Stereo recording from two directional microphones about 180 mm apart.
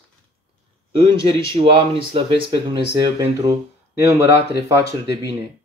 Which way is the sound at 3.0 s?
20° right (ahead or behind).